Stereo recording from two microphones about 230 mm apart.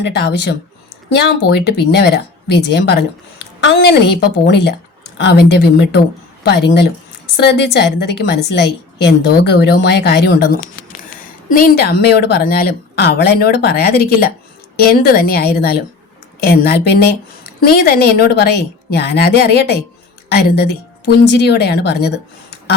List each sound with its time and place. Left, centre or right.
0.0 s a woman's voice: left